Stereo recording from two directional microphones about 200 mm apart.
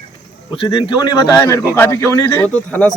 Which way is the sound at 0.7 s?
20° left (ahead or behind).